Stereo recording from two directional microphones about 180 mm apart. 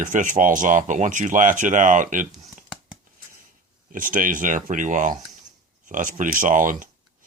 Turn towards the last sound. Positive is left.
turn(degrees=-45)  # may be behind; listen again after turning